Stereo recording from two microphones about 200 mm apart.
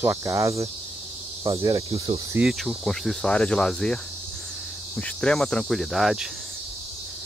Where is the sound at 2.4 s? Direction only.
Centre (ahead or behind).